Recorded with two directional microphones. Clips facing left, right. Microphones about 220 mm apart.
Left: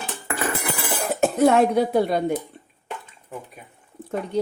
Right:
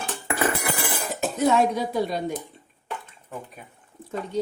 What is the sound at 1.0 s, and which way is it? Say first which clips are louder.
Speech: left 6 dB; 55° left (ahead or behind).